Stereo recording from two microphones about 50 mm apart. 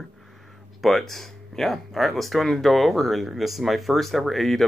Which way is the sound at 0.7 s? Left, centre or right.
Centre.